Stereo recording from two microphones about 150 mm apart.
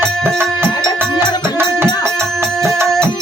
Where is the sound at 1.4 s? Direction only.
15° right (ahead or behind).